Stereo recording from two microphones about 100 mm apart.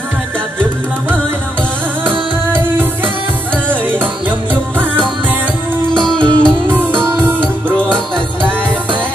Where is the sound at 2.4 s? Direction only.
20° right (ahead or behind).